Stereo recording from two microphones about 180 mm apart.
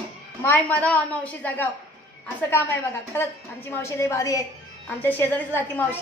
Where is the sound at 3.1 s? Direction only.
15° left (ahead or behind).